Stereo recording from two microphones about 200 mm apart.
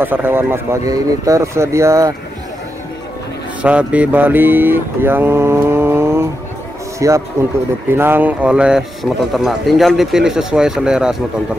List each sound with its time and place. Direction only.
0.0 s speech: 10° right (ahead or behind)
3.6 s a man's voice: 5° right (ahead or behind)